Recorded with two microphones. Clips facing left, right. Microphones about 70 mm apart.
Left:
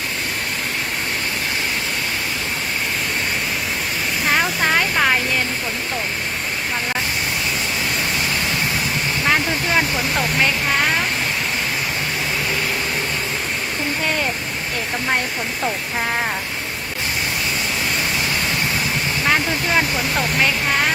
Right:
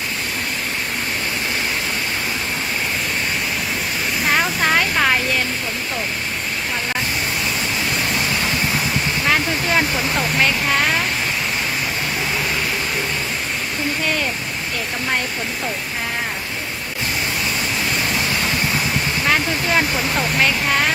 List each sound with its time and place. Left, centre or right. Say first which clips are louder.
4.3 s speech: even; centre
9.3 s speech: even; centre
19.3 s speech: even; centre